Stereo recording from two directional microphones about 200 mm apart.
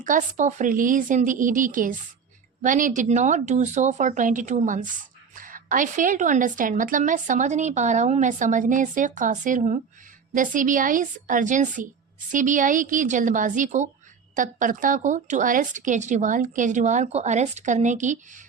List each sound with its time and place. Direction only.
0.0 s a woman's voice: 40° right (ahead or behind)